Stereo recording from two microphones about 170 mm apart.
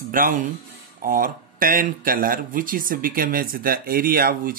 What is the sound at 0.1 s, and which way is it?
Speech, 55° right (ahead or behind).